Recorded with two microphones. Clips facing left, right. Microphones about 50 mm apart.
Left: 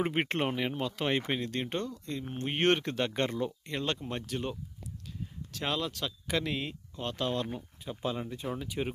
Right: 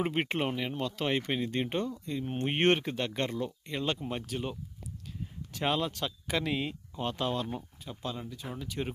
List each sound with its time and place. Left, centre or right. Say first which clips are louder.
0.0 s speech: even; centre
1.5 s speech: right 2 dB; centre
2.3 s speech: right 1 dB; right
2.7 s speech: left 1 dB; centre
3.1 s speech: left 2 dB; centre
5.5 s speech: right 3 dB; centre
8.0 s speech: left 4 dB; left
8.5 s speech: right 1 dB; centre